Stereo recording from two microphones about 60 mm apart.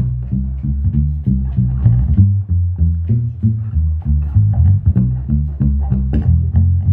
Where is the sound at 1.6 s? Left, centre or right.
Right.